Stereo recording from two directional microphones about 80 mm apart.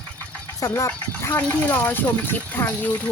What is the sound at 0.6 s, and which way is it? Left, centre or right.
Speech, left.